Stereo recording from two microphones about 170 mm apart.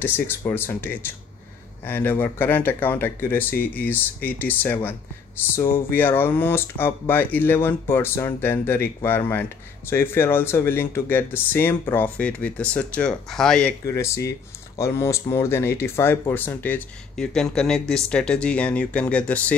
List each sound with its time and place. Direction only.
0.5 s speech: 10° left (ahead or behind)
13.8 s speech: 15° left (ahead or behind)